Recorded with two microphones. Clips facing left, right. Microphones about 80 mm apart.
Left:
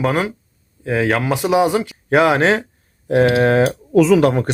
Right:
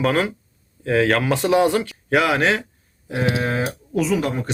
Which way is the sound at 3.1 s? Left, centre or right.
Left.